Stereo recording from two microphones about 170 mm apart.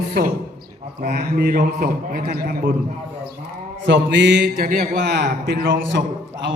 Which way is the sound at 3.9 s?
90° right.